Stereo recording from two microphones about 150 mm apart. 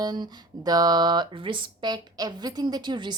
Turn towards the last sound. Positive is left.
turn(degrees=-30)  # may be behind; listen again after turning